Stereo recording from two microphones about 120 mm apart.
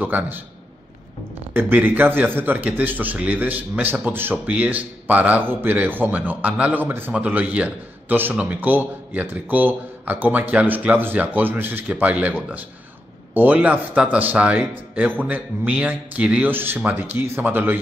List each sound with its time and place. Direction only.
0.0 s a man's voice: 15° right (ahead or behind)
1.5 s a man's voice: 15° right (ahead or behind)